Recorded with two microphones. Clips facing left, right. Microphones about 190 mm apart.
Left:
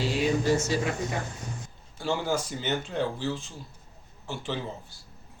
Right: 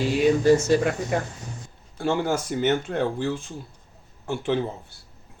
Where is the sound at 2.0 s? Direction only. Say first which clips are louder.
Right 4 dB; 55° right (ahead or behind).